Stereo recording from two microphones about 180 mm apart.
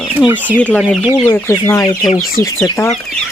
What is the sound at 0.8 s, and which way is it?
Speech, 5° right (ahead or behind).